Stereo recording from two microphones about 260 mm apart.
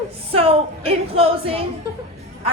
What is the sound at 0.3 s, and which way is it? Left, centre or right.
A woman's voice, right.